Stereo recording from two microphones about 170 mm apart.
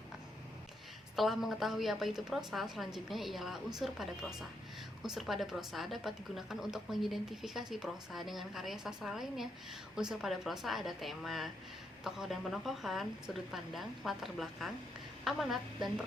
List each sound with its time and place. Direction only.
1.1 s a woman's voice: centre (ahead or behind)